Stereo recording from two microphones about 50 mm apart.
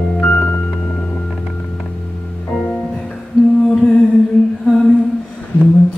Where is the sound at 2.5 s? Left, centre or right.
Centre.